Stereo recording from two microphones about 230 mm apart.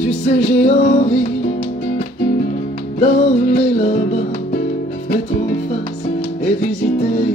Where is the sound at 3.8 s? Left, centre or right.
Left.